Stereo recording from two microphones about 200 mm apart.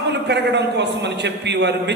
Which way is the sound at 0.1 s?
60° right (ahead or behind).